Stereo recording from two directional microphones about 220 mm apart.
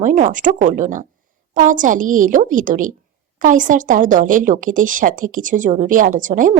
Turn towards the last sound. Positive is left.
turn(degrees=-35)  # may be behind; listen again after turning